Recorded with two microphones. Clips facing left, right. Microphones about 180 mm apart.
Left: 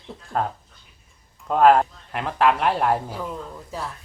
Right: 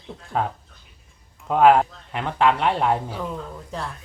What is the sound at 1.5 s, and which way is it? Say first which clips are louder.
A woman's voice: even; centre (ahead or behind).